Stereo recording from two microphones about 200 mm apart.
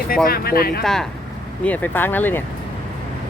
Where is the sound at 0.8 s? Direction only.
Centre (ahead or behind).